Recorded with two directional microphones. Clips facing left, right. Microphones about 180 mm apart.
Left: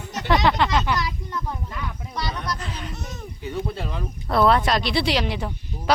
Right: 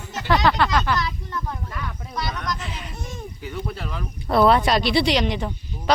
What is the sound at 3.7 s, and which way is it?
Speech, 25° left (ahead or behind).